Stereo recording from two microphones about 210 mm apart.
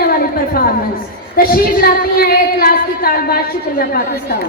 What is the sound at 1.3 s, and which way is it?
A woman's voice, 45° left (ahead or behind).